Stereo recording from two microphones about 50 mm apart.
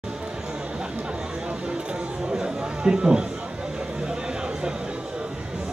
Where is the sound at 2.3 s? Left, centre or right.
Centre.